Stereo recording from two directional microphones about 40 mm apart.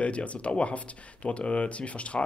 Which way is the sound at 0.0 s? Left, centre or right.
Left.